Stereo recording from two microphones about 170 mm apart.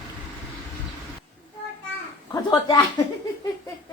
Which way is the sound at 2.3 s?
20° left (ahead or behind).